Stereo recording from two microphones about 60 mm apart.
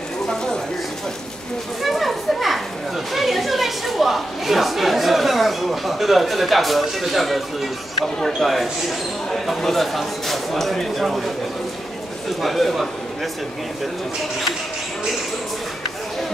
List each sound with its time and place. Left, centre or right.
0.3 s speech: centre
1.8 s a sound: centre
3.1 s a woman's voice: centre
12.4 s a woman's voice: centre